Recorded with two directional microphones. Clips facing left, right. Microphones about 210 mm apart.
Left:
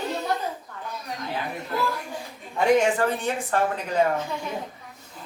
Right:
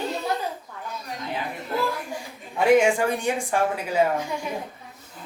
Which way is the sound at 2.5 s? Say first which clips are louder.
Right 2 dB; 10° right (ahead or behind).